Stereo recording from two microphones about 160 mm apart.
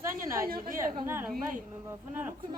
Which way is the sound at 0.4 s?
60° right (ahead or behind).